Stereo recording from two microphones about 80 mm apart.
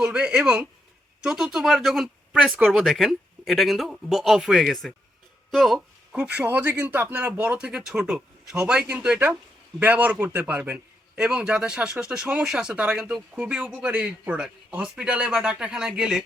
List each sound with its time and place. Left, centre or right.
0.0 s a man's voice: centre
2.5 s speech: centre
2.7 s speech: centre
5.5 s a sound: centre
6.2 s a man's voice: right
9.1 s a man's voice: right